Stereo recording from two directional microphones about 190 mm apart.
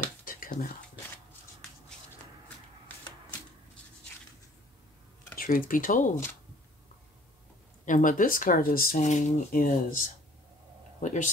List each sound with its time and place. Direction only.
0.2 s a sound: 45° left (ahead or behind)
5.4 s speech: 45° left (ahead or behind)
7.8 s speech: 45° left (ahead or behind)